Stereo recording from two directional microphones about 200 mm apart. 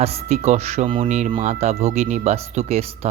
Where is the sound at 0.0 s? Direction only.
30° right (ahead or behind).